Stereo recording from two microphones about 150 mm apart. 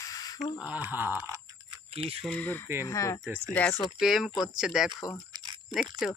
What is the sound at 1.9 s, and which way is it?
Speech, 40° right (ahead or behind).